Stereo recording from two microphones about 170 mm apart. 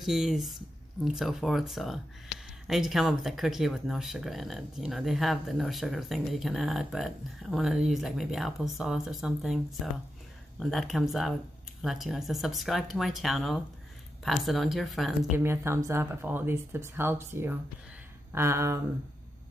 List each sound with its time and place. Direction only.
0.0 s speech: centre (ahead or behind)
15.3 s speech: 15° right (ahead or behind)